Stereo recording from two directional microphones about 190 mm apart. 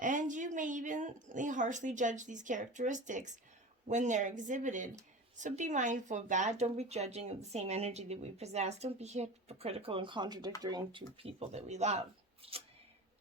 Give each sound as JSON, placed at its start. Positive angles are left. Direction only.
{"t": 0.0, "sound": "speech", "side_deg": -40}